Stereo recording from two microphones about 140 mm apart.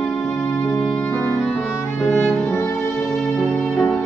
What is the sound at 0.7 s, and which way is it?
Music, 5° left (ahead or behind).